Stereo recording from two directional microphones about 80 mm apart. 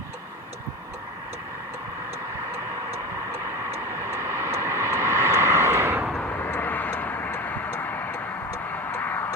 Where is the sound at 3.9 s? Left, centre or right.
Right.